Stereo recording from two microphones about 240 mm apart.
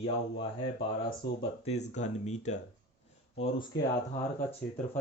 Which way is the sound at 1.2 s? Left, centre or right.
Left.